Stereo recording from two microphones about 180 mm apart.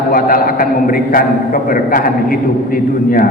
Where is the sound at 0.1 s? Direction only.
55° left (ahead or behind).